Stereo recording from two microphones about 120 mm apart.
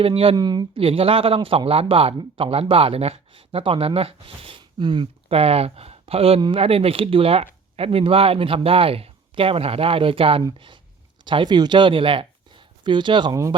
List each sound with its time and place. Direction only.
0.0 s speech: 50° right (ahead or behind)
0.3 s speech: 35° right (ahead or behind)
0.8 s speech: 50° right (ahead or behind)